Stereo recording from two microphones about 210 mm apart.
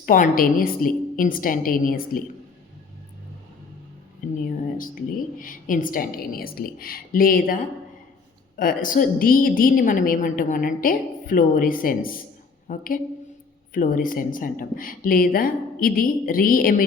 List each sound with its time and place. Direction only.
0.0 s a woman's voice: 40° left (ahead or behind)
4.2 s speech: 40° left (ahead or behind)
5.4 s a woman's voice: 40° left (ahead or behind)